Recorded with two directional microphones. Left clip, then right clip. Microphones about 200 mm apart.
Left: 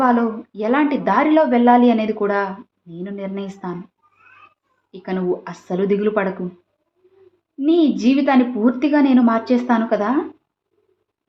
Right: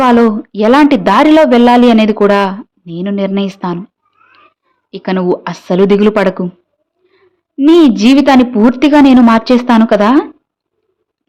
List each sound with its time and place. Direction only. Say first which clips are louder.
0.0 s a woman's voice: right 9 dB; 50° right (ahead or behind)
4.9 s a woman's voice: right 9 dB; 45° right (ahead or behind)
7.5 s a woman's voice: right 10 dB; 45° right (ahead or behind)